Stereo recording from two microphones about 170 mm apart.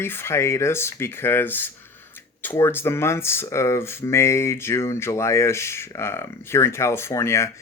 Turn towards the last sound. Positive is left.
turn(degrees=15)  # may be behind; listen again after turning